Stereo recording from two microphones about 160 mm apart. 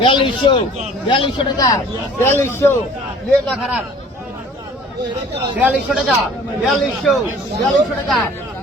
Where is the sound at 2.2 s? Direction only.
15° left (ahead or behind).